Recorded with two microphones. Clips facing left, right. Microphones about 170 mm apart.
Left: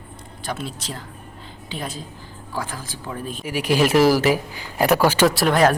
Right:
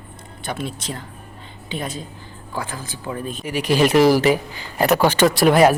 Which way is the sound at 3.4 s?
10° left (ahead or behind).